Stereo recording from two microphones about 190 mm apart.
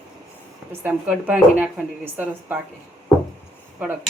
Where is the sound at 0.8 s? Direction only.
10° right (ahead or behind).